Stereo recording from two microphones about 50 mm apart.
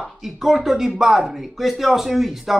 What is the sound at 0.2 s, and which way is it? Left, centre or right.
A man's voice, centre.